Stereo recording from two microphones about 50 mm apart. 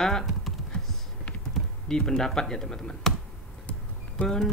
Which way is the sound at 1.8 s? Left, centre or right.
Centre.